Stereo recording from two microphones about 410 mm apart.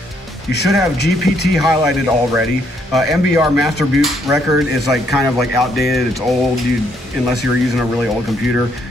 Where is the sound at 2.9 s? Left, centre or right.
Centre.